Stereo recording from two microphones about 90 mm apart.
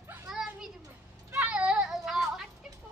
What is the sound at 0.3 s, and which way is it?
Children playing, 5° right (ahead or behind).